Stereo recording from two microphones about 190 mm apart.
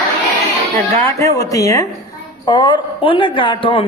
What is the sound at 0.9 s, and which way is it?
Speech, 15° left (ahead or behind).